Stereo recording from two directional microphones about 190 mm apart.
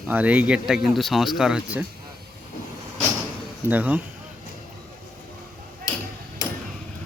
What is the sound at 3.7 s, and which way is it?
Speech, 10° right (ahead or behind).